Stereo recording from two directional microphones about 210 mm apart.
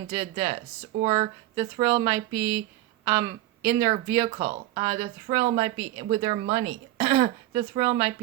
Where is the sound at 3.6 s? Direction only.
15° right (ahead or behind).